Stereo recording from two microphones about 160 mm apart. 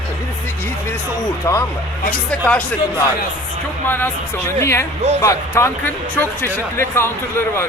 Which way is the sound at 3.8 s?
15° left (ahead or behind).